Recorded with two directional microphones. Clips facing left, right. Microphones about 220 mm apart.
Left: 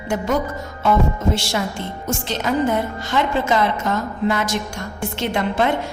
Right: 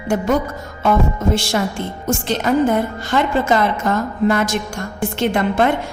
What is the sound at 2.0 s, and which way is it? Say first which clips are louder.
A woman's voice: right 5 dB; 50° right (ahead or behind).